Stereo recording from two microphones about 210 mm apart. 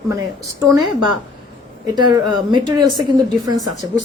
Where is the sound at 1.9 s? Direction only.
20° right (ahead or behind).